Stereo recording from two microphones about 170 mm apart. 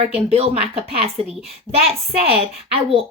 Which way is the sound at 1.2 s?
35° right (ahead or behind).